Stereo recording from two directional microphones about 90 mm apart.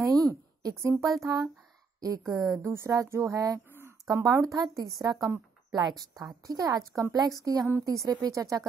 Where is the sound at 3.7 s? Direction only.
25° right (ahead or behind).